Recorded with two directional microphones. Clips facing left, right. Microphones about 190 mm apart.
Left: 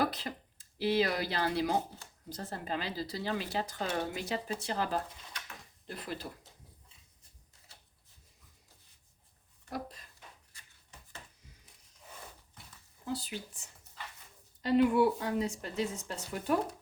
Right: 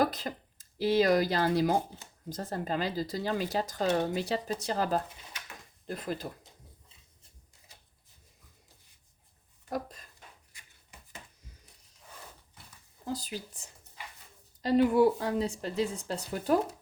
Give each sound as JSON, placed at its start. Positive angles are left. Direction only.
{"t": 0.0, "sound": "speech", "side_deg": -45}
{"t": 9.6, "sound": "speech", "side_deg": -45}
{"t": 13.1, "sound": "speech", "side_deg": -40}